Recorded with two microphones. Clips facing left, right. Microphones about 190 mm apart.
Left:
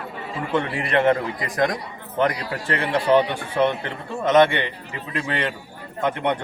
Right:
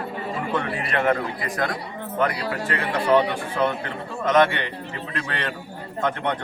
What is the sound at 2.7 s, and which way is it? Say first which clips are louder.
A man's voice: left 2 dB; 30° left (ahead or behind).